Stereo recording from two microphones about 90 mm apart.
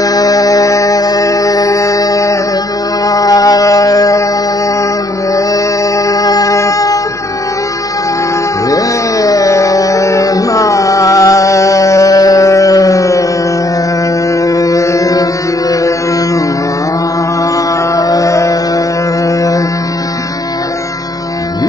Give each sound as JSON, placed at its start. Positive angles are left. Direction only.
{"t": 0.0, "sound": "music", "side_deg": 40}
{"t": 3.1, "sound": "a sound", "side_deg": 40}
{"t": 6.0, "sound": "music", "side_deg": 40}
{"t": 8.6, "sound": "a sound", "side_deg": 40}
{"t": 14.4, "sound": "music", "side_deg": 40}
{"t": 17.9, "sound": "music", "side_deg": 40}